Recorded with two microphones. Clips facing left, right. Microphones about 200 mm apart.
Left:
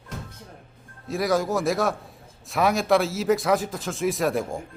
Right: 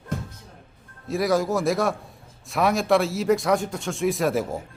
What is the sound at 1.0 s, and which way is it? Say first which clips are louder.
Speech: right 1 dB; centre (ahead or behind).